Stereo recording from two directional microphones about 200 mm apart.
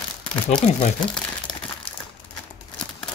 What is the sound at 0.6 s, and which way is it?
Speech, 35° left (ahead or behind).